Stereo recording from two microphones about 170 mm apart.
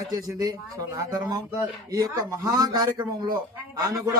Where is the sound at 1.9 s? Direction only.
20° right (ahead or behind).